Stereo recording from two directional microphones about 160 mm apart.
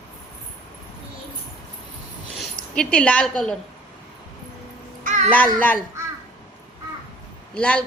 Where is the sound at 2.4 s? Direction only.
5° left (ahead or behind).